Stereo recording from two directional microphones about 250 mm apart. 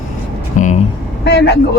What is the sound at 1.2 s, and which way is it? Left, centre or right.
Speech, left.